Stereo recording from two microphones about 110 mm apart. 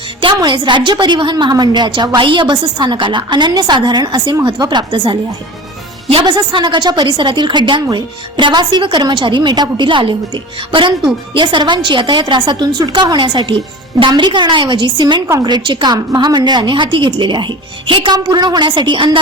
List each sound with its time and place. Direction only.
0.2 s a woman's voice: 45° right (ahead or behind)
6.1 s a woman's voice: 55° right (ahead or behind)
6.3 s a woman's voice: 45° right (ahead or behind)